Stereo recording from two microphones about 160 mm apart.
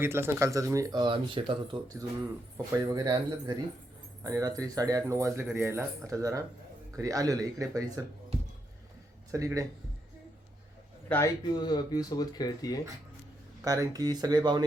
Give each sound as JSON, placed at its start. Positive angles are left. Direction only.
{"t": 0.0, "sound": "speech", "side_deg": -15}
{"t": 9.3, "sound": "speech", "side_deg": -20}
{"t": 11.1, "sound": "a man's voice", "side_deg": 10}
{"t": 11.4, "sound": "speech", "side_deg": 25}
{"t": 13.7, "sound": "speech", "side_deg": -20}